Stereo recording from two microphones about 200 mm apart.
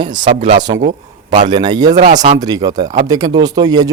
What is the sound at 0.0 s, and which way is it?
Speech, 20° right (ahead or behind).